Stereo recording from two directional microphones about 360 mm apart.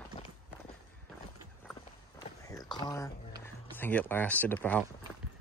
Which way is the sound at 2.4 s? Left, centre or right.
Centre.